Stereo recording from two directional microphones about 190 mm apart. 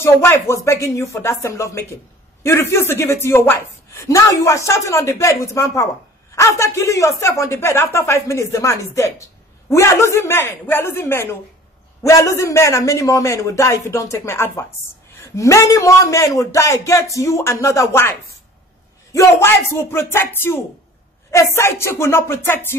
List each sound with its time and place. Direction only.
0.0 s speech: 15° left (ahead or behind)
19.1 s speech: 15° left (ahead or behind)